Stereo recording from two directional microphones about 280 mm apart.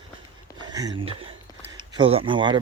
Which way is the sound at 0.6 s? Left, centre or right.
Centre.